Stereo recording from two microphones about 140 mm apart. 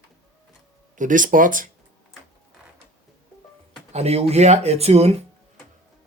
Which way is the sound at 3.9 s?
50° right (ahead or behind).